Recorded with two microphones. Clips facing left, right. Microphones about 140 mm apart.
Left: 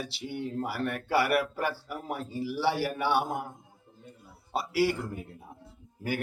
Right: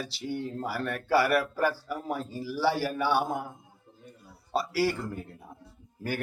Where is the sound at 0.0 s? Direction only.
20° left (ahead or behind).